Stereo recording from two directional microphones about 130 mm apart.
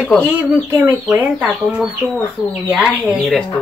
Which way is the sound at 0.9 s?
15° right (ahead or behind).